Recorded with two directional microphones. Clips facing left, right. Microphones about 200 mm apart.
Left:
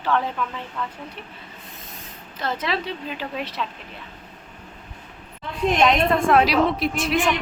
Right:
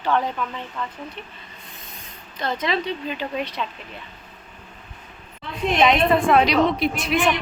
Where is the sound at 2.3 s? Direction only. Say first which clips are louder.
Right 2 dB; 5° left (ahead or behind).